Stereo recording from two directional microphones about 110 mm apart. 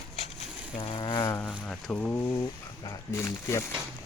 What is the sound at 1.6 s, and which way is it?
Speech, 10° left (ahead or behind).